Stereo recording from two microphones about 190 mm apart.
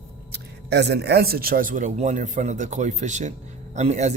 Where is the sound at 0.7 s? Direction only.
60° right (ahead or behind).